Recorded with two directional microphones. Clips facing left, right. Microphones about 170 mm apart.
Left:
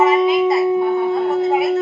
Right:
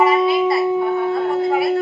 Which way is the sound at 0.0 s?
20° left (ahead or behind).